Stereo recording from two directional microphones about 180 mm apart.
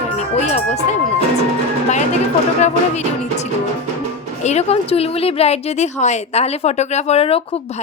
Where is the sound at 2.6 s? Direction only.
40° left (ahead or behind).